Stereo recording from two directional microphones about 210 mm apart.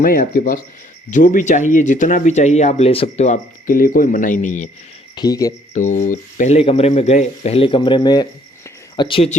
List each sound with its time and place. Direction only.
0.0 s speech: 40° left (ahead or behind)
5.1 s speech: 20° left (ahead or behind)
5.7 s speech: 35° left (ahead or behind)